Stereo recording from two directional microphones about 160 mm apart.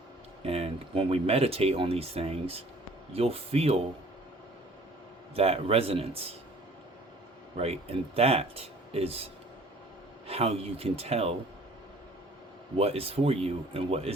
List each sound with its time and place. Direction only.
0.4 s speech: 40° right (ahead or behind)
5.3 s speech: 40° right (ahead or behind)
7.5 s speech: 40° right (ahead or behind)
12.7 s speech: 40° right (ahead or behind)